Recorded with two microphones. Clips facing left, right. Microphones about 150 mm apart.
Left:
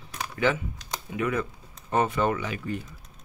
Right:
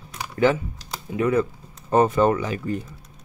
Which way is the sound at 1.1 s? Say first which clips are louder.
Right 7 dB; 35° right (ahead or behind).